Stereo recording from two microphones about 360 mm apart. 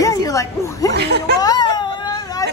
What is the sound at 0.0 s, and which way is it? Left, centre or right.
Speech, centre.